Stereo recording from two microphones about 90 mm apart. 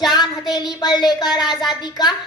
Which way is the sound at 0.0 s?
55° left (ahead or behind).